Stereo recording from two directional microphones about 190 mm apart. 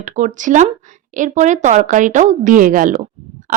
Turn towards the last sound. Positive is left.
turn(degrees=-45)  # may be behind; listen again after turning